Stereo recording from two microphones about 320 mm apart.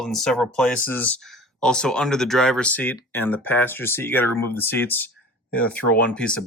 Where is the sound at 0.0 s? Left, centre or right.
Centre.